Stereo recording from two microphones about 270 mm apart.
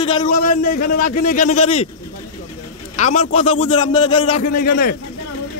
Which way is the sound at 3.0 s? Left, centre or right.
Left.